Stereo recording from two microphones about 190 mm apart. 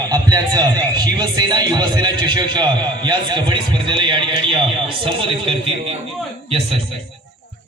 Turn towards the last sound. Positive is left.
turn(degrees=-30)  # may be behind; listen again after turning